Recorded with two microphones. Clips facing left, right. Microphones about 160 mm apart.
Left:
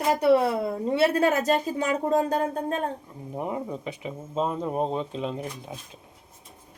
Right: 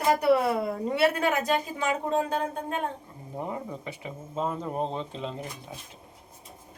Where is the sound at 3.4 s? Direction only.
15° left (ahead or behind).